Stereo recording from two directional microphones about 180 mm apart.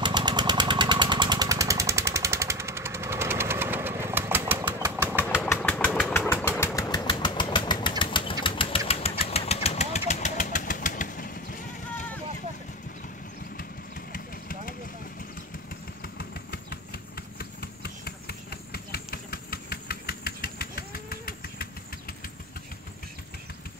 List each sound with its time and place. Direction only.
0.0 s engine: 25° right (ahead or behind)
5.3 s engine: 10° left (ahead or behind); by 12.1 s 45° left (ahead or behind)
14.1 s vehicle: 50° left (ahead or behind)
16.0 s engine: 60° left (ahead or behind)